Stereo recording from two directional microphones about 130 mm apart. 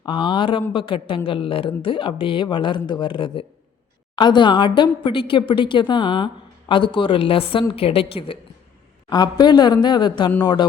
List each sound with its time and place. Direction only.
0.0 s a woman's voice: 40° left (ahead or behind)
9.0 s a woman's voice: 30° left (ahead or behind)